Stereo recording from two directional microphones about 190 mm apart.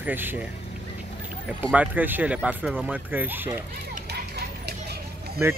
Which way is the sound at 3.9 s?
60° right (ahead or behind).